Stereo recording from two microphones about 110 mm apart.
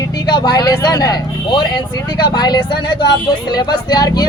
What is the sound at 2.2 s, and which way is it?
Speech, 40° left (ahead or behind).